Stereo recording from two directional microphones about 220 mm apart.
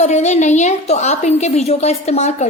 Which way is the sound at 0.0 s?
30° left (ahead or behind).